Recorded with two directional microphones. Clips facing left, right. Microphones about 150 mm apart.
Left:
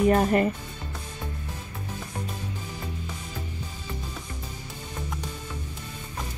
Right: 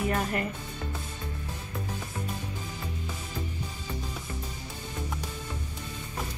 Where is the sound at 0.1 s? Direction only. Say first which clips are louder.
Left 8 dB; 30° left (ahead or behind).